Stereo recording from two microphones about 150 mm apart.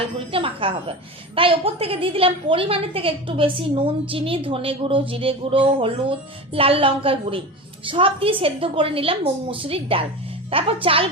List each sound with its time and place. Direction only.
0.3 s a woman's voice: 35° right (ahead or behind)